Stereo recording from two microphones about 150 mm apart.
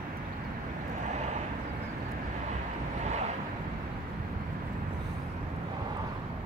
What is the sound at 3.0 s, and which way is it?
Boat, 50° right (ahead or behind).